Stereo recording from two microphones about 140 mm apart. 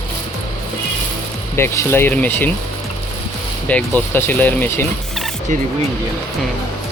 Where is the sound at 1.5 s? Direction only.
20° left (ahead or behind).